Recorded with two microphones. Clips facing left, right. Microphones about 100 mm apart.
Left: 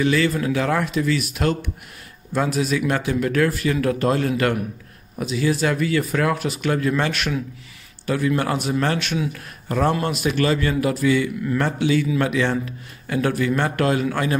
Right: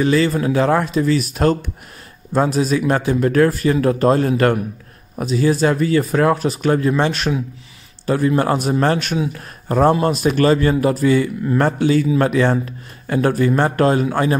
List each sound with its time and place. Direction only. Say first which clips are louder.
0.0 s a man's voice: right 4 dB; 35° right (ahead or behind)